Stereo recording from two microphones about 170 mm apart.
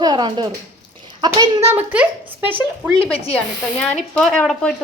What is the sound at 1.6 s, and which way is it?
Speech, 10° right (ahead or behind).